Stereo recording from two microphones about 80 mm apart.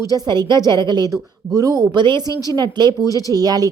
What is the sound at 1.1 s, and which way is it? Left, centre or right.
A woman's voice, right.